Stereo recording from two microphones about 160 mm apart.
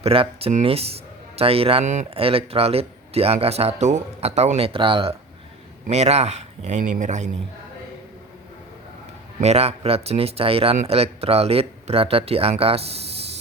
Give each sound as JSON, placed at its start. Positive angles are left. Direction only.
{"t": 0.0, "sound": "speech", "side_deg": -35}
{"t": 5.9, "sound": "speech", "side_deg": -40}
{"t": 9.4, "sound": "speech", "side_deg": -40}